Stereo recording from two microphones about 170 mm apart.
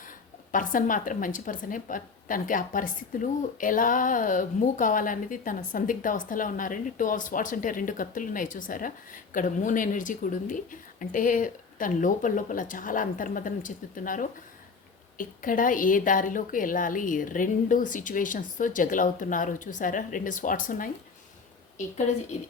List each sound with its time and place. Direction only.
0.5 s a woman's voice: 50° left (ahead or behind)